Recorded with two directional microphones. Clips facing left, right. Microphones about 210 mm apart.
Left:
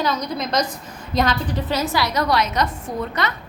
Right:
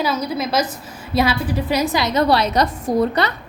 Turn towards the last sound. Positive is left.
turn(degrees=-35)  # may be behind; listen again after turning